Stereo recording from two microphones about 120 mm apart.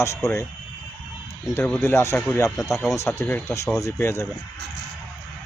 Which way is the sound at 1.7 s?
20° left (ahead or behind).